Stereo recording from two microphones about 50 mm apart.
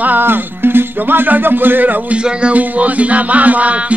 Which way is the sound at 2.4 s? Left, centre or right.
Right.